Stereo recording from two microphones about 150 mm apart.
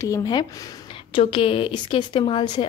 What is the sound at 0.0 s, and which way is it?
A woman's voice, 25° left (ahead or behind).